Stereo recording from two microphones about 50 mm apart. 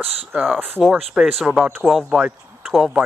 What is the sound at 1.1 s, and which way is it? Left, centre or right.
Speech, centre.